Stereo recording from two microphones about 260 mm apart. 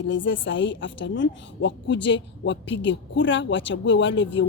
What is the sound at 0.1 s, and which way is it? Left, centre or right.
Speech, left.